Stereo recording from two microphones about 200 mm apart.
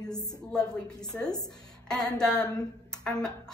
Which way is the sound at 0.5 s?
5° left (ahead or behind).